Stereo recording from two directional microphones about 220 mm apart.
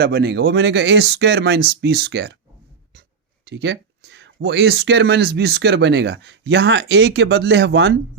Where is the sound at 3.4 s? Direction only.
50° right (ahead or behind).